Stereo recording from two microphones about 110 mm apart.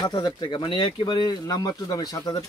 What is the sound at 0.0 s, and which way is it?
Speech, 40° left (ahead or behind).